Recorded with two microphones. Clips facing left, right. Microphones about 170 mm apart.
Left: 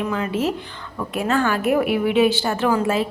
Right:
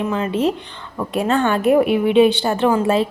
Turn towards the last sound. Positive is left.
turn(degrees=-25)  # may be behind; listen again after turning